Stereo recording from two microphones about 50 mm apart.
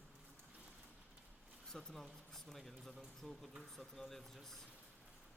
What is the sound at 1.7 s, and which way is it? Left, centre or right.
Speech, centre.